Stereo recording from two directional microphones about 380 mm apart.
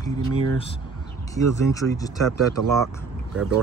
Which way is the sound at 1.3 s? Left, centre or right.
Centre.